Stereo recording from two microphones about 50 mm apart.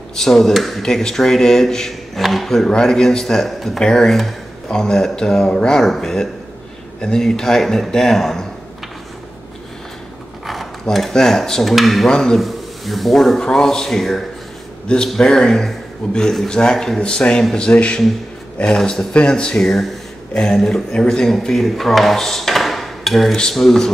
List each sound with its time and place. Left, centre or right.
0.1 s speech: centre
10.4 s speech: centre
12.1 s speech: centre
12.4 s speech: centre